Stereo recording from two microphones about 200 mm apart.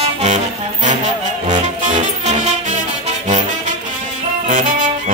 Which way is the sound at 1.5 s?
40° right (ahead or behind).